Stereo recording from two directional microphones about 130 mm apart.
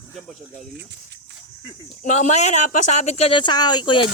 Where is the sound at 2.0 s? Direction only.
65° left (ahead or behind); by 4.1 s 40° left (ahead or behind).